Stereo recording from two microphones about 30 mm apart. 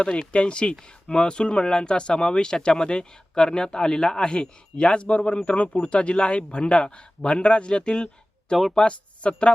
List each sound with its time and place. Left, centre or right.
0.0 s a man's voice: left
5.7 s a man's voice: left